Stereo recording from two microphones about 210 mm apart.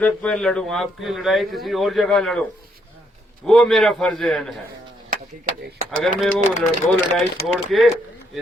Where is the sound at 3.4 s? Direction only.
Centre (ahead or behind).